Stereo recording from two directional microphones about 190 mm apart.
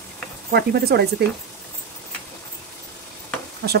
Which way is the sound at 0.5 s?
60° right (ahead or behind).